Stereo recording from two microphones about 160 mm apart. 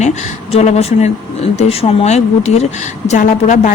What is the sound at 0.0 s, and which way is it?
A woman's voice, 45° left (ahead or behind).